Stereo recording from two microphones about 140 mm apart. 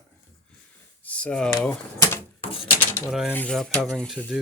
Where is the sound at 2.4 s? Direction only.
40° left (ahead or behind).